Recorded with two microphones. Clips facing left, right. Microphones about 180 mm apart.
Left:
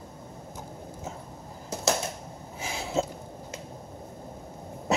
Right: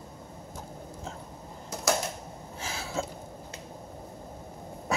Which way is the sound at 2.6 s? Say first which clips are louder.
Left 5 dB; 15° left (ahead or behind).